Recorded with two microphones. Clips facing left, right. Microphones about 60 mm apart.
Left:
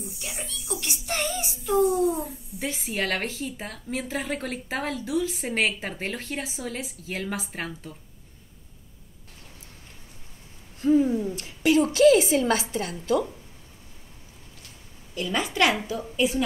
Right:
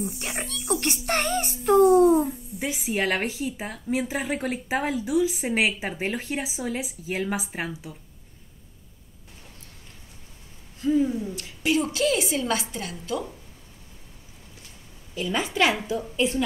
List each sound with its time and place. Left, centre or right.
0.0 s speech: right
2.2 s speech: centre
10.8 s owl: left
11.3 s a woman's voice: left
15.1 s speech: centre